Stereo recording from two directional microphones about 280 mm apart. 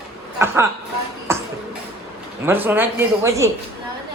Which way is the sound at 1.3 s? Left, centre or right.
Centre.